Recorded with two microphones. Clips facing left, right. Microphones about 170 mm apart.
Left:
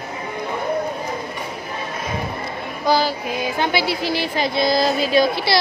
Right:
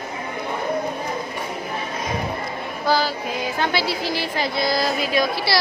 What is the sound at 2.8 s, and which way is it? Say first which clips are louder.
Female singing: left 2 dB; 15° left (ahead or behind).